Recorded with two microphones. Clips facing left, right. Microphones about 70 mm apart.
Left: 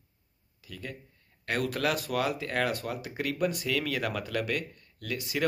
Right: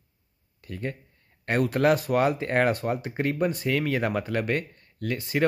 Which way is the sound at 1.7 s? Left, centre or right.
Right.